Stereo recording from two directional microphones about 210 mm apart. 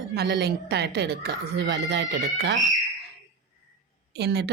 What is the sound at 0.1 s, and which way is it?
A woman's voice, 50° right (ahead or behind).